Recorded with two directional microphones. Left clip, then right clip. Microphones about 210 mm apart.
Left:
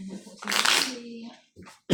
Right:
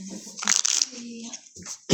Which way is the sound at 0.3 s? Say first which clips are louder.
Right 1 dB; 30° right (ahead or behind).